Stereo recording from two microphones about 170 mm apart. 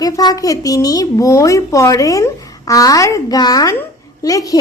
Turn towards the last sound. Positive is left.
turn(degrees=20)  # may be behind; listen again after turning